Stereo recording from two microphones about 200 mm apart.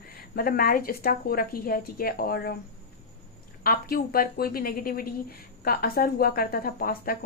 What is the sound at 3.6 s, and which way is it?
Speech, 45° left (ahead or behind).